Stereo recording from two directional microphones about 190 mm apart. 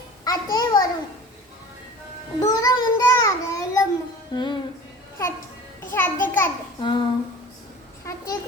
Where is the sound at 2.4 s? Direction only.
20° left (ahead or behind).